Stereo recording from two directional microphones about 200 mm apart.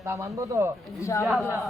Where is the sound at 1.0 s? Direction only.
15° left (ahead or behind).